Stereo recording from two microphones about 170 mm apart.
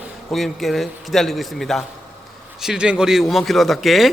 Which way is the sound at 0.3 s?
Centre (ahead or behind).